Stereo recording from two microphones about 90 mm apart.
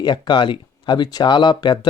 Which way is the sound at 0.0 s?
60° left (ahead or behind).